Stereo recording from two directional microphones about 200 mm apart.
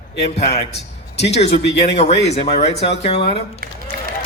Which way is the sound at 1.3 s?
30° left (ahead or behind).